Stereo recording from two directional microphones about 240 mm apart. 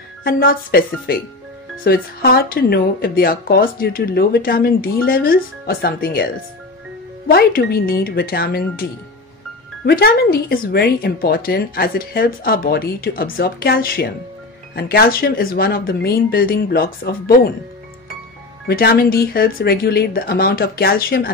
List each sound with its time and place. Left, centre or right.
0.2 s speech: left
9.8 s speech: left
18.7 s speech: left